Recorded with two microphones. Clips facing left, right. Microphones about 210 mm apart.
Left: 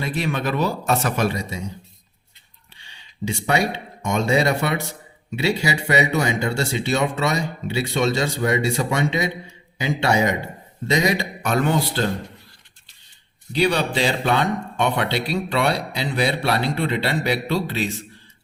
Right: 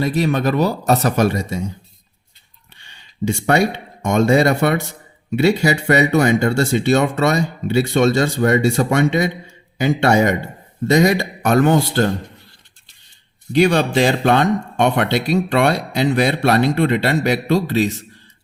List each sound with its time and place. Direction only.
0.0 s speech: 40° right (ahead or behind)
2.7 s a sound: 55° right (ahead or behind)
4.0 s speech: 50° right (ahead or behind)
13.6 s speech: 45° right (ahead or behind)